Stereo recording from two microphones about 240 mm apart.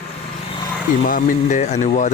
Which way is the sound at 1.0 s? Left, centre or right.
Left.